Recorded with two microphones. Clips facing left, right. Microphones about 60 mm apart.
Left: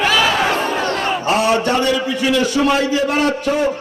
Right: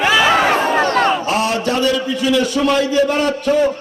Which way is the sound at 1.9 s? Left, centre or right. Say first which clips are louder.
Even; centre.